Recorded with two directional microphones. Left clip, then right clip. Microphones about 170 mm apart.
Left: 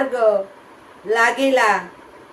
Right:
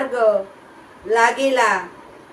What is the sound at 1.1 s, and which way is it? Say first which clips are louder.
Speech: even; 15° left (ahead or behind).